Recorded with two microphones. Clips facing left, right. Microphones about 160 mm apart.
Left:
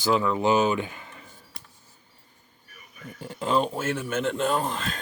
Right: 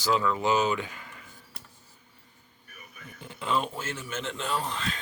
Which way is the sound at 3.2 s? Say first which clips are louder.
Left 5 dB; 40° left (ahead or behind).